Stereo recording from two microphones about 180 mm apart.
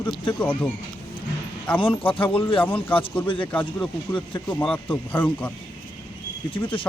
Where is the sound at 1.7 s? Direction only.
25° left (ahead or behind).